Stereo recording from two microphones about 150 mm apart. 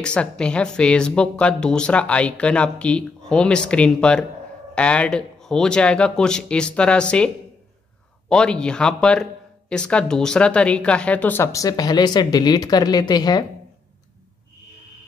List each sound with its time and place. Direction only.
0.0 s a man's voice: 5° left (ahead or behind)
8.3 s a man's voice: 5° left (ahead or behind); by 13.4 s 25° left (ahead or behind)